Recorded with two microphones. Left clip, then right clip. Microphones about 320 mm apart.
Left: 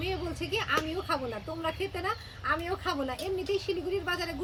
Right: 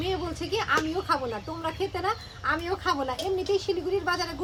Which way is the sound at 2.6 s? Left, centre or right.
Centre.